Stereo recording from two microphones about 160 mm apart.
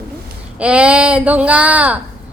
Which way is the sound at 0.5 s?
5° right (ahead or behind).